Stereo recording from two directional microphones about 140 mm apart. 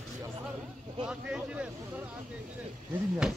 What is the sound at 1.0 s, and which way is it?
Speech, 5° right (ahead or behind).